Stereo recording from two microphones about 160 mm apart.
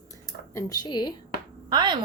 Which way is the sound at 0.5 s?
25° left (ahead or behind).